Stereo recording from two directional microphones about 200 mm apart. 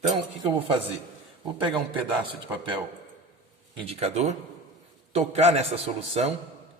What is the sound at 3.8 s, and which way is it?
A man's voice, 30° right (ahead or behind).